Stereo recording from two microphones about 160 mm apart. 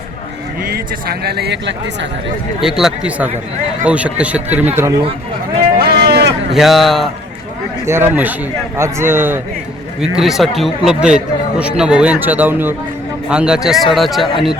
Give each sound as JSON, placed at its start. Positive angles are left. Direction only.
{"t": 0.6, "sound": "speech", "side_deg": -75}
{"t": 2.6, "sound": "a man's voice", "side_deg": -5}
{"t": 5.8, "sound": "a sound", "side_deg": -75}
{"t": 6.5, "sound": "speech", "side_deg": 0}
{"t": 7.9, "sound": "a man's voice", "side_deg": -15}
{"t": 10.0, "sound": "speech", "side_deg": 0}